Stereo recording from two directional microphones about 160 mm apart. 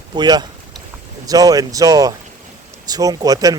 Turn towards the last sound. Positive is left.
turn(degrees=-25)  # may be behind; listen again after turning